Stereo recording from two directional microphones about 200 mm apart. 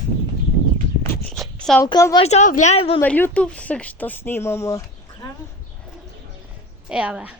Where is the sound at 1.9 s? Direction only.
20° left (ahead or behind).